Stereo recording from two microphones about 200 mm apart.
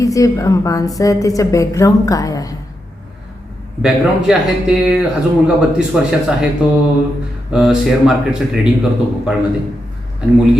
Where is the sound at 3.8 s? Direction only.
5° right (ahead or behind).